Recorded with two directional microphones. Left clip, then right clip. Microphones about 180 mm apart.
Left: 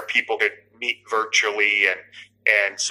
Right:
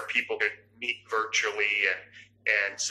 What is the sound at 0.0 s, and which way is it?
Speech, 30° left (ahead or behind).